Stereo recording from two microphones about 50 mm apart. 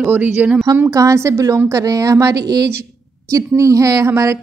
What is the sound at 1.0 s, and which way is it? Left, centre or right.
A woman's voice, right.